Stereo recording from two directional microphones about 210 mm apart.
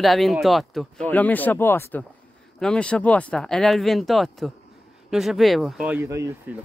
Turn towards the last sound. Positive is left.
turn(degrees=-10)  # may be behind; listen again after turning